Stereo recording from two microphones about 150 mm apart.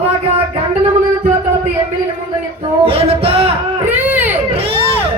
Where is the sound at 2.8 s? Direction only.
40° right (ahead or behind).